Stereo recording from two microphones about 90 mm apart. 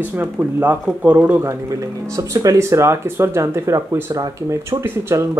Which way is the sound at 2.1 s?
40° right (ahead or behind).